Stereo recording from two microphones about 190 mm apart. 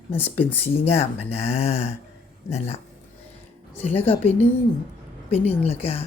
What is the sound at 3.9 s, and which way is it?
Speech, 30° left (ahead or behind).